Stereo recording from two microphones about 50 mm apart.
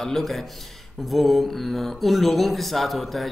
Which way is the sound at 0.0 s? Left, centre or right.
Centre.